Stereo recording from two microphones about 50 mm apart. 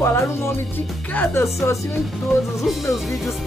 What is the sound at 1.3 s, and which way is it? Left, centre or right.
Speech, left.